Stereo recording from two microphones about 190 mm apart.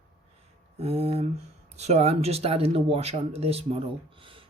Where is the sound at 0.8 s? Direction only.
30° right (ahead or behind).